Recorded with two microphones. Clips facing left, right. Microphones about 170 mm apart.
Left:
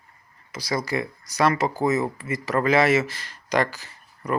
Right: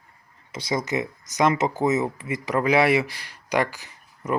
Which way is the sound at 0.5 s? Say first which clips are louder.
Right 1 dB; 25° right (ahead or behind).